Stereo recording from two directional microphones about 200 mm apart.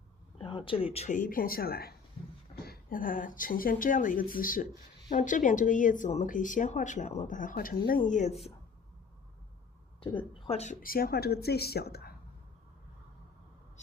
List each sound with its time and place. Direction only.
0.3 s speech: 25° left (ahead or behind)
10.0 s speech: 25° left (ahead or behind); by 12.1 s 50° left (ahead or behind)